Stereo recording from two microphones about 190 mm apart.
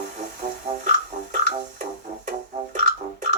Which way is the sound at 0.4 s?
40° right (ahead or behind).